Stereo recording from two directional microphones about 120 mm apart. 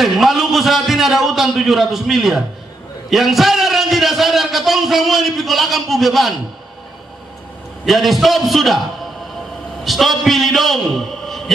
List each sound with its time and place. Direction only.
0.0 s a man's voice: centre (ahead or behind)
7.8 s a man's voice: centre (ahead or behind)
9.8 s a man's voice: centre (ahead or behind)